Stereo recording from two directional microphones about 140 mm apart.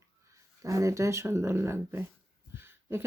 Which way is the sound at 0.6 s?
25° right (ahead or behind).